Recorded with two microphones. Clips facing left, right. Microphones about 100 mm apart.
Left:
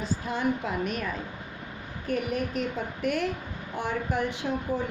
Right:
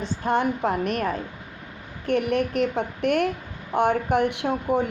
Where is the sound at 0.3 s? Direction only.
55° right (ahead or behind).